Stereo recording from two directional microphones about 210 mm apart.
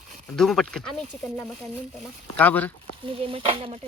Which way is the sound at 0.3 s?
Centre (ahead or behind).